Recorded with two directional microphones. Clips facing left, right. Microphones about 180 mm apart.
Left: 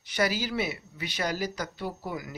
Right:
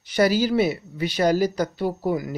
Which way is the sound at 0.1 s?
35° right (ahead or behind).